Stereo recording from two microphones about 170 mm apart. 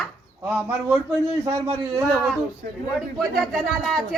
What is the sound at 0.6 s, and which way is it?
Speech, 10° right (ahead or behind).